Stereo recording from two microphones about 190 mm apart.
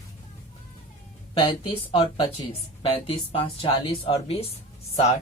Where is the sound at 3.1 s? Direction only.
25° left (ahead or behind).